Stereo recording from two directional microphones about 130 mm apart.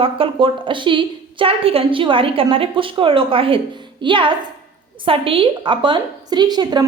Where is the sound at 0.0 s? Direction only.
45° right (ahead or behind).